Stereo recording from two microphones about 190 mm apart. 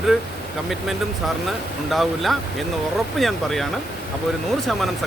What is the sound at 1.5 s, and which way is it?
Speech, centre (ahead or behind).